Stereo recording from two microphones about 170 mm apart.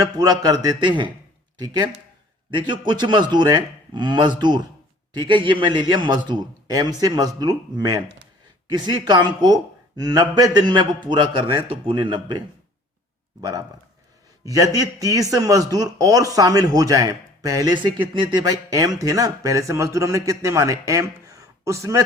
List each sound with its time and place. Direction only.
0.0 s speech: 20° right (ahead or behind)
13.4 s speech: 20° right (ahead or behind)